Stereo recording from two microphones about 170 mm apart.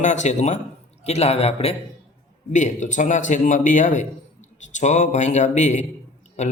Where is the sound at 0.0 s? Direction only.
45° left (ahead or behind).